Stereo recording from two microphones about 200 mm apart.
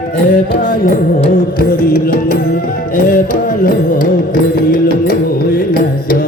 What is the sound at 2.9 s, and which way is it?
Music, 45° left (ahead or behind).